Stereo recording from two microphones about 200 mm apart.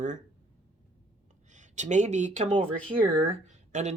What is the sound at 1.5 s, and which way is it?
Speech, 35° right (ahead or behind).